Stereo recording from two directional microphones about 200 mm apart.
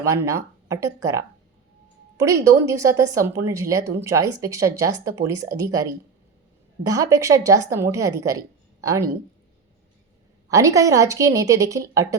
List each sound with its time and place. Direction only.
0.0 s a woman's voice: 15° right (ahead or behind)
10.5 s a woman's voice: 15° right (ahead or behind)